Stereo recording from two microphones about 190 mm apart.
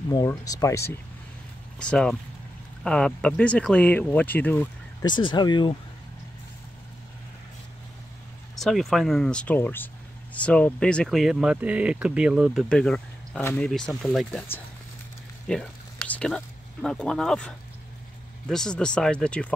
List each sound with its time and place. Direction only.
0.1 s speech: 20° left (ahead or behind)
1.8 s speech: 5° left (ahead or behind)
5.0 s speech: 25° left (ahead or behind)
8.5 s speech: centre (ahead or behind)